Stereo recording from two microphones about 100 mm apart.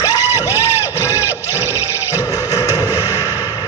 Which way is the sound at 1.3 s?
20° right (ahead or behind).